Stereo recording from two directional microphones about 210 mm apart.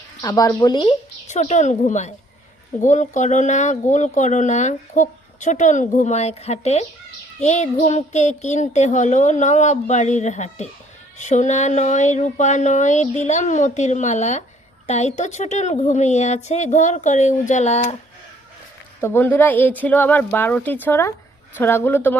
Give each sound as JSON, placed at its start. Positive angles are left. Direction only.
{"t": 0.2, "sound": "speech", "side_deg": 15}
{"t": 1.3, "sound": "speech", "side_deg": 35}
{"t": 19.0, "sound": "speech", "side_deg": 10}